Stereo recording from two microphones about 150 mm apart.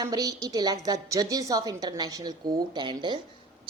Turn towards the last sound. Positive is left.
turn(degrees=-30)  # may be behind; listen again after turning